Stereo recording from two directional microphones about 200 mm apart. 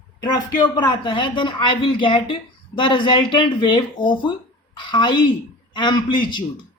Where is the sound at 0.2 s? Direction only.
20° left (ahead or behind).